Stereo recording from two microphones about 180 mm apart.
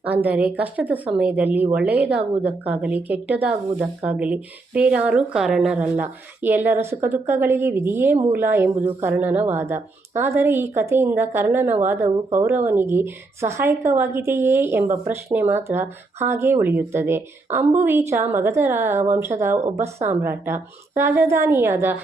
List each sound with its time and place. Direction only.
0.0 s speech: 10° right (ahead or behind)